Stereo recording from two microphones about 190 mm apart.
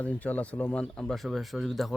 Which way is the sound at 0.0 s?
5° left (ahead or behind).